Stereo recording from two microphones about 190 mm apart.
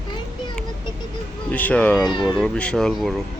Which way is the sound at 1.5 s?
5° left (ahead or behind).